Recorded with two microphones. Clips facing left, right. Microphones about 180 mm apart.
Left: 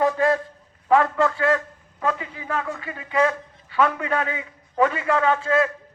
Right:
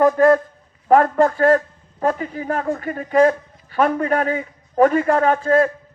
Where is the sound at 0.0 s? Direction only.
50° right (ahead or behind).